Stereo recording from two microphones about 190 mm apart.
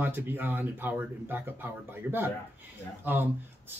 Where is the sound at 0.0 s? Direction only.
10° right (ahead or behind).